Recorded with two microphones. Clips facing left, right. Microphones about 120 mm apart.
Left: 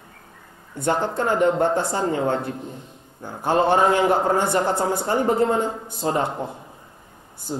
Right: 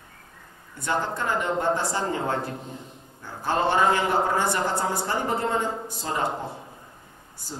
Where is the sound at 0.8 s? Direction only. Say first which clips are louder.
Left 5 dB; 55° left (ahead or behind).